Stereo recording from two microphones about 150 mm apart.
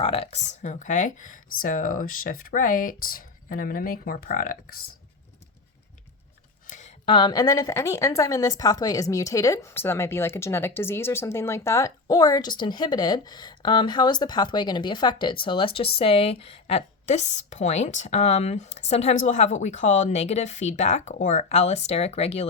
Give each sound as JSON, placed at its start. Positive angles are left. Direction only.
{"t": 0.0, "sound": "speech", "side_deg": 40}
{"t": 6.7, "sound": "a sound", "side_deg": 55}
{"t": 7.0, "sound": "a woman's voice", "side_deg": 35}